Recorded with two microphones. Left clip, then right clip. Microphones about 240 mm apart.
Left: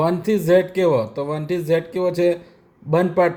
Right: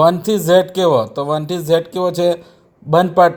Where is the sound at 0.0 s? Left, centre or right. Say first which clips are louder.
Right 6 dB; centre.